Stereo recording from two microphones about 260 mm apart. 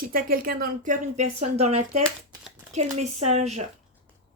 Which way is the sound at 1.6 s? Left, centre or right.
Right.